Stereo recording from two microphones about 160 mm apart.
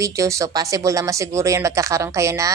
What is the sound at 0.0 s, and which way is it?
Speech, 20° right (ahead or behind).